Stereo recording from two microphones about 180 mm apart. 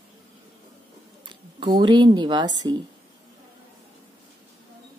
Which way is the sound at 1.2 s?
25° right (ahead or behind).